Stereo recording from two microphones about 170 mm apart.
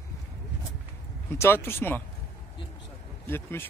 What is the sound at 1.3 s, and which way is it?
Speech, 15° left (ahead or behind).